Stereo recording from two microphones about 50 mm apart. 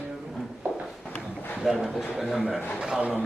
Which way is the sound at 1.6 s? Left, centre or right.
Centre.